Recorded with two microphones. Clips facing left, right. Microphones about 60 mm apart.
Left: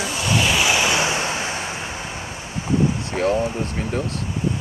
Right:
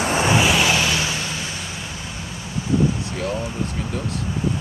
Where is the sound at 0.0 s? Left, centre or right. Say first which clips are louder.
Right 6 dB; right.